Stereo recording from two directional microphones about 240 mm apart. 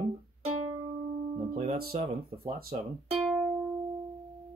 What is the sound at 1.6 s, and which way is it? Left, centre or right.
Speech, right.